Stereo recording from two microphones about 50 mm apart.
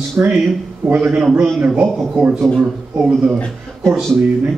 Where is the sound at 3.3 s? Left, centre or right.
Left.